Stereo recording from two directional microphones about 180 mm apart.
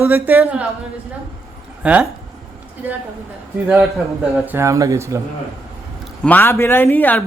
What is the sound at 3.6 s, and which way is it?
A man's voice, 5° right (ahead or behind).